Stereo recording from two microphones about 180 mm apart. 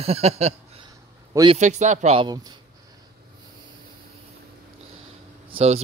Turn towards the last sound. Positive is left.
turn(degrees=-30)  # may be behind; listen again after turning